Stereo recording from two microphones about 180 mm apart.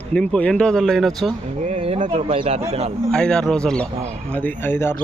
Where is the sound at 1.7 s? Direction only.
35° right (ahead or behind).